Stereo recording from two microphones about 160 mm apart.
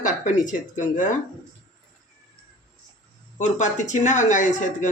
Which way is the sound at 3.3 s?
50° left (ahead or behind).